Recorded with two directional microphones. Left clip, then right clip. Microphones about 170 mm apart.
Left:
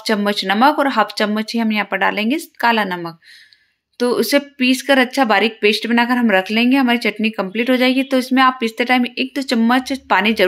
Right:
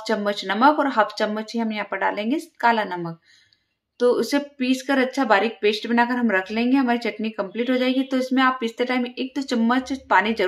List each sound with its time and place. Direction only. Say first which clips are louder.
0.0 s speech: left 5 dB; 30° left (ahead or behind)